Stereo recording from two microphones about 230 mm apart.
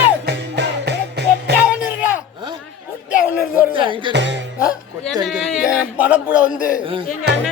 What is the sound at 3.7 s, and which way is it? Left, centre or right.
Music, right.